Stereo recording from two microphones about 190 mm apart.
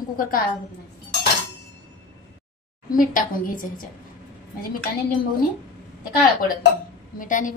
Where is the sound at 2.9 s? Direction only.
45° left (ahead or behind).